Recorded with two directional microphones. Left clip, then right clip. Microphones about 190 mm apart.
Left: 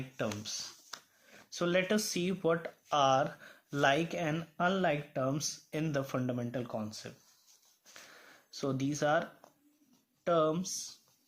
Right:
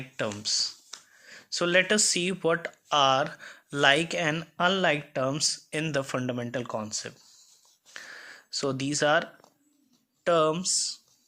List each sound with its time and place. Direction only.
0.2 s speech: 25° right (ahead or behind)
7.9 s a sound: 20° right (ahead or behind)
10.2 s speech: 20° right (ahead or behind)